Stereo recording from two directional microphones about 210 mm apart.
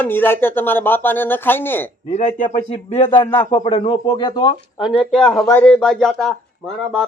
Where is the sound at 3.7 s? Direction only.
20° left (ahead or behind).